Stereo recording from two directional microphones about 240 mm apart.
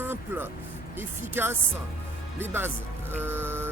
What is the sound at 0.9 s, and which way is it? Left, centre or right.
Speech, centre.